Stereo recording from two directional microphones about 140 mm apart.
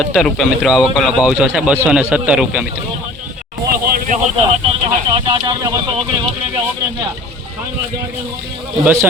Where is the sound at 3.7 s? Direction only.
90° right.